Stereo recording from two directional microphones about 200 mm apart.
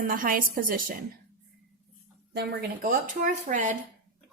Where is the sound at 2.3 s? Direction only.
50° right (ahead or behind).